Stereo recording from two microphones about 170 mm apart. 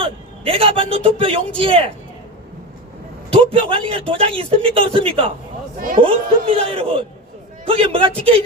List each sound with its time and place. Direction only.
0.0 s a man's voice: 35° right (ahead or behind)
3.3 s speech: 35° right (ahead or behind)